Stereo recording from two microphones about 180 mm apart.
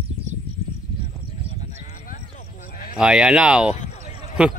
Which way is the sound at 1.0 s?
35° left (ahead or behind).